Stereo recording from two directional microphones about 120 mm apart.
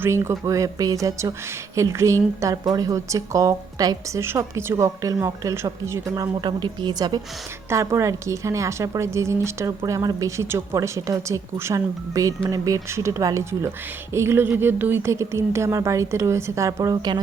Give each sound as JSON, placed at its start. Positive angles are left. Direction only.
{"t": 0.0, "sound": "speech", "side_deg": -25}
{"t": 6.4, "sound": "a woman's voice", "side_deg": -35}
{"t": 7.7, "sound": "speech", "side_deg": -25}